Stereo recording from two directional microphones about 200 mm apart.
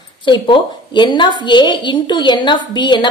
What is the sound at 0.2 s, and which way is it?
A woman's voice, 25° left (ahead or behind).